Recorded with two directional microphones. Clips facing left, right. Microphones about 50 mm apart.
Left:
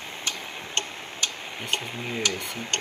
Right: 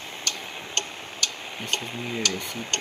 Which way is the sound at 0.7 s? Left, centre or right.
Left.